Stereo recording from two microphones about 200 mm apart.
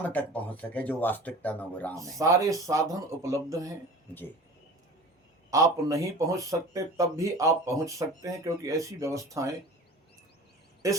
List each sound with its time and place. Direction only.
0.0 s speech: 10° left (ahead or behind)
2.0 s speech: 15° right (ahead or behind)
4.1 s speech: 10° left (ahead or behind)
5.5 s speech: 15° right (ahead or behind)